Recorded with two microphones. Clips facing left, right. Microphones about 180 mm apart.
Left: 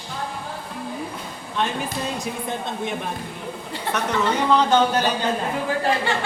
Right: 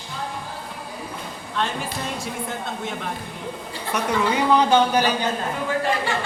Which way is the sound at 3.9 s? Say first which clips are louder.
Right 1 dB; 10° right (ahead or behind).